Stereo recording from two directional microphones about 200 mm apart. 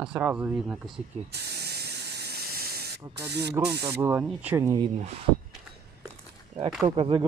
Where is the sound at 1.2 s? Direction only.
55° right (ahead or behind).